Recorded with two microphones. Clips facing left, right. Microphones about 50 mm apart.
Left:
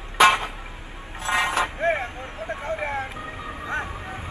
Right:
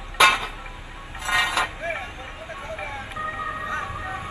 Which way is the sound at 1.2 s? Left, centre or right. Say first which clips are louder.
Even; left.